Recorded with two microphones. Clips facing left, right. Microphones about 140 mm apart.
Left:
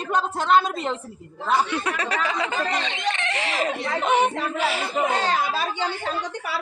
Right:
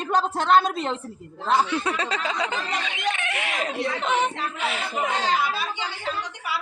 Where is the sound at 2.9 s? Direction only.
10° right (ahead or behind).